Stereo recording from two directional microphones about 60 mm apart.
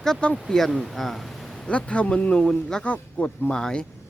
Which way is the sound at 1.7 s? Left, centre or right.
Left.